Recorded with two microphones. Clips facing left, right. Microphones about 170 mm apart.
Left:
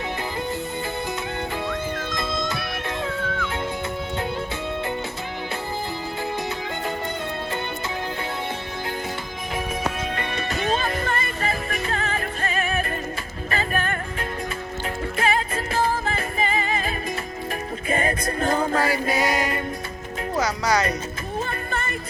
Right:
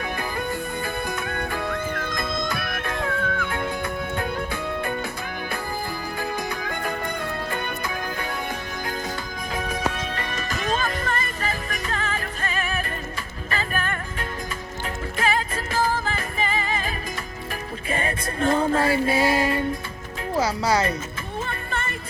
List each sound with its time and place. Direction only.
1.3 s music: 20° left (ahead or behind)
10.3 s music: 35° left (ahead or behind)
15.2 s music: 35° left (ahead or behind)
17.8 s music: 35° left (ahead or behind)
18.7 s music: 30° right (ahead or behind)
20.3 s speech: 30° right (ahead or behind)
21.4 s music: 35° left (ahead or behind)